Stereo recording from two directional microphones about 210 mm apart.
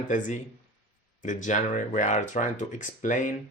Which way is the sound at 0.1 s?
35° left (ahead or behind).